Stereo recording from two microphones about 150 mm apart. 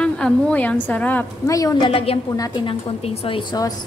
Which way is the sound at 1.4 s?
25° left (ahead or behind).